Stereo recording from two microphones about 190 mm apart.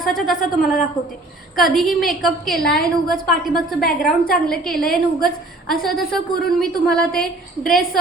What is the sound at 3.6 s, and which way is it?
Speech, 50° left (ahead or behind).